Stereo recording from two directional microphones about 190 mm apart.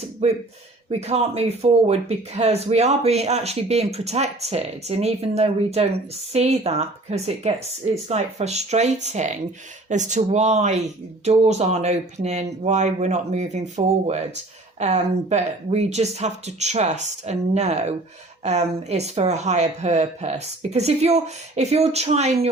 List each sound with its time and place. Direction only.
0.0 s speech: 35° right (ahead or behind)